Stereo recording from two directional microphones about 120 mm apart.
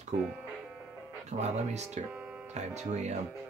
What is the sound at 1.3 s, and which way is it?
Speech, 70° right (ahead or behind).